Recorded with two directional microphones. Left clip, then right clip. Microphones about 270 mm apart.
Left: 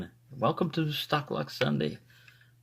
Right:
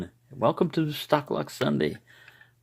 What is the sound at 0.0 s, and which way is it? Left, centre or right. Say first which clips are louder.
Speech: right 4 dB; right.